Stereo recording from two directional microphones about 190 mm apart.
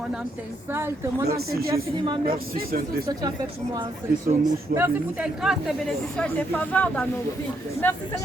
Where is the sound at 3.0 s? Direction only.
20° right (ahead or behind).